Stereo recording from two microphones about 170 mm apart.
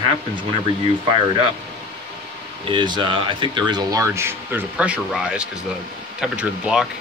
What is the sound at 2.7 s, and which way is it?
Speech, 30° right (ahead or behind).